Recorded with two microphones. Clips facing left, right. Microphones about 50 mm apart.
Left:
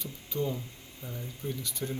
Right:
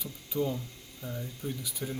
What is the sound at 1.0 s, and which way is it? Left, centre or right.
Speech, centre.